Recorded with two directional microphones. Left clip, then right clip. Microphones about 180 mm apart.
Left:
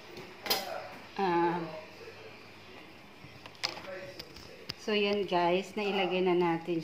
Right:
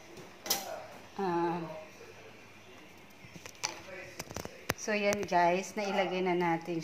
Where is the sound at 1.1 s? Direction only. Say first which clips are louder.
Left 3 dB; 25° right (ahead or behind).